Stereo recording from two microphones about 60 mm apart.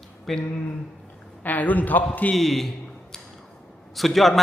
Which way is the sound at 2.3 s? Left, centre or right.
Centre.